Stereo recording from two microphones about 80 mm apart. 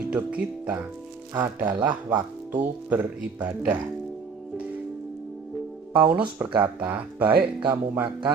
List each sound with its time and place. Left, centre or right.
0.1 s speech: centre
6.0 s speech: centre
6.7 s speech: right
7.2 s speech: right